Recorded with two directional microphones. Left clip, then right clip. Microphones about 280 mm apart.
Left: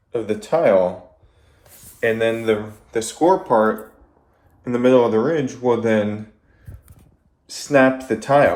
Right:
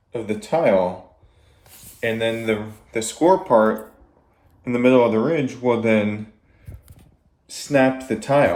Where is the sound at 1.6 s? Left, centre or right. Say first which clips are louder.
Left 4 dB; centre.